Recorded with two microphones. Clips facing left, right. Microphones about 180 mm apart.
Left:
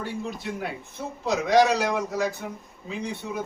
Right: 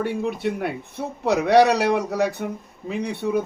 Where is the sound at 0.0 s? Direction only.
65° right (ahead or behind).